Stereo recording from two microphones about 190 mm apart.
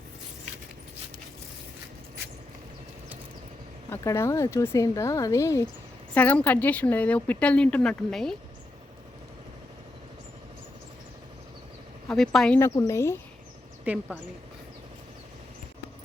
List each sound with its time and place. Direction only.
3.8 s a woman's voice: 15° left (ahead or behind)
12.0 s a woman's voice: centre (ahead or behind)
13.8 s a woman's voice: 5° right (ahead or behind)